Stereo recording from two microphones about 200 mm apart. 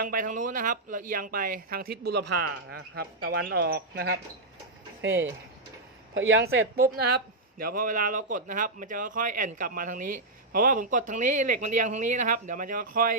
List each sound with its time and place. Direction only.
0.0 s speech: 45° right (ahead or behind)
6.1 s speech: 90° right
6.8 s speech: 55° right (ahead or behind)